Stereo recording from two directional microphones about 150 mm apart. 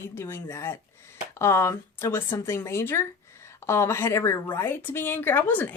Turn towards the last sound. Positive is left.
turn(degrees=10)  # may be behind; listen again after turning